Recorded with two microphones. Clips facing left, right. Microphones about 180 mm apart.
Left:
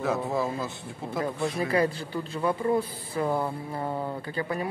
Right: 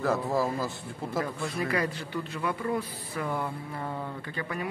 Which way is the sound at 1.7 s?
30° left (ahead or behind).